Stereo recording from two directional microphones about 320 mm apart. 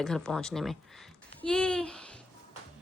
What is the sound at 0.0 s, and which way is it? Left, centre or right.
A woman's voice, centre.